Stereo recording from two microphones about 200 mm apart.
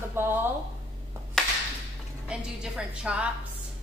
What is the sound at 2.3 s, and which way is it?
A woman's voice, 5° right (ahead or behind).